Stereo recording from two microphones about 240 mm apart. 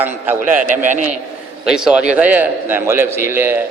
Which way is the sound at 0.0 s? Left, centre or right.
Centre.